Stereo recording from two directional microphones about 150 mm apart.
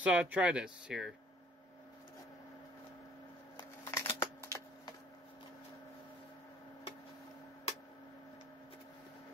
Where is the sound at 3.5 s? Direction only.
15° left (ahead or behind).